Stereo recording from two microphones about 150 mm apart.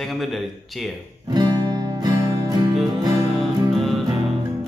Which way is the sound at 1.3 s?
30° right (ahead or behind).